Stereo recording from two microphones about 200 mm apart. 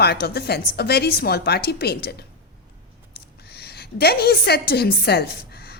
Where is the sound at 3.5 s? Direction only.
55° left (ahead or behind).